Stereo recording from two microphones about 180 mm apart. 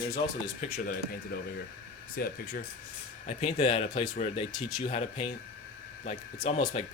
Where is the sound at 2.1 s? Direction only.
50° left (ahead or behind).